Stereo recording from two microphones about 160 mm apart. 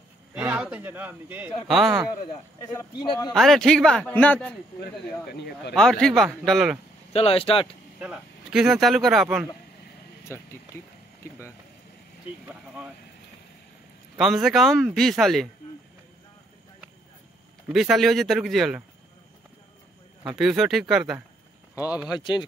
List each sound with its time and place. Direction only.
0.3 s a man's voice: 5° right (ahead or behind)
2.6 s speech: 20° left (ahead or behind)
3.3 s speech: centre (ahead or behind)
5.3 s speech: 90° left
5.8 s speech: 5° left (ahead or behind)
7.1 s speech: 40° left (ahead or behind)
8.0 s speech: 5° right (ahead or behind)
12.4 s speech: 5° right (ahead or behind)
14.1 s speech: centre (ahead or behind)
17.7 s speech: centre (ahead or behind)
20.2 s speech: centre (ahead or behind)
21.7 s speech: 20° left (ahead or behind)